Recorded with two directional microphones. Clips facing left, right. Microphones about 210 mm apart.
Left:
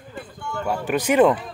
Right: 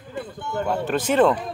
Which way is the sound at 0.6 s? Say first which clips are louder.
Left 1 dB; 10° left (ahead or behind).